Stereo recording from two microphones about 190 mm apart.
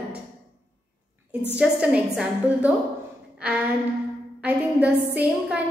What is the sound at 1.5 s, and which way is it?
A woman's voice, 5° right (ahead or behind).